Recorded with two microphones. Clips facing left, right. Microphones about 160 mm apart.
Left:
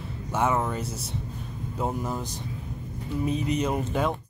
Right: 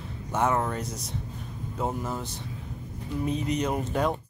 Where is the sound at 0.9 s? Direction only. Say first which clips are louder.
Left 1 dB; 30° left (ahead or behind).